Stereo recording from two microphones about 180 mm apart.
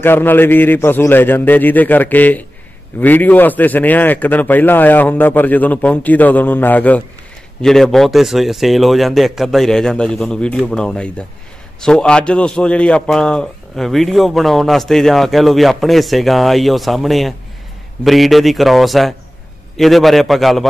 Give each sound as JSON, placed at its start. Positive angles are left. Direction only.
{"t": 0.0, "sound": "a man's voice", "side_deg": 10}